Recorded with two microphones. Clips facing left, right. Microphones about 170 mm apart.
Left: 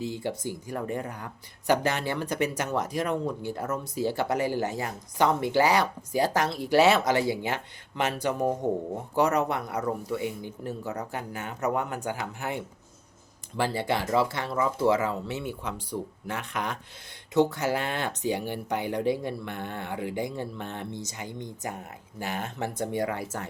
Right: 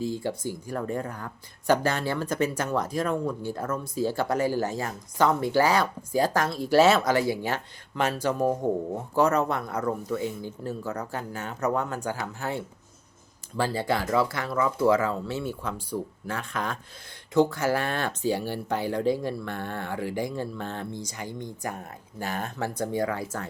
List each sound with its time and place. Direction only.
0.2 s speech: 15° left (ahead or behind)